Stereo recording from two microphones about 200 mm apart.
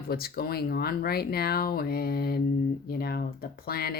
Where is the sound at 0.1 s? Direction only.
50° left (ahead or behind).